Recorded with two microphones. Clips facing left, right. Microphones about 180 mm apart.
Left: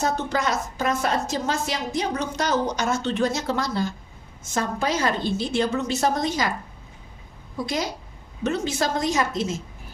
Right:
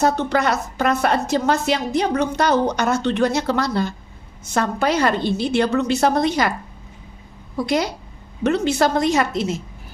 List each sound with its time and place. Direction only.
0.0 s a woman's voice: 65° right (ahead or behind)
7.5 s a woman's voice: 65° right (ahead or behind)